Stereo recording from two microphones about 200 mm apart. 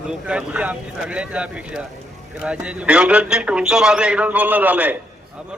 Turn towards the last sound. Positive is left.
turn(degrees=-5)  # may be behind; listen again after turning